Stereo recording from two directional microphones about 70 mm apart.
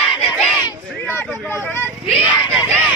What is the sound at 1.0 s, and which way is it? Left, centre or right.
Speech, left.